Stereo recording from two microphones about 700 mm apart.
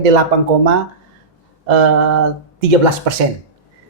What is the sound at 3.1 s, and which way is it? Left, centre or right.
Speech, right.